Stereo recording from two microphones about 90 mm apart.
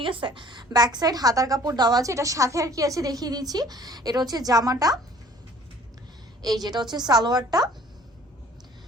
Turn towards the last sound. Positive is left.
turn(degrees=-50)  # may be behind; listen again after turning